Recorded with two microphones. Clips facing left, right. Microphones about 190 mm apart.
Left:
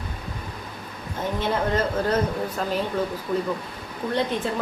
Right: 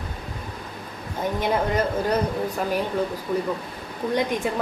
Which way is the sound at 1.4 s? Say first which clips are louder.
Right 1 dB; 15° right (ahead or behind).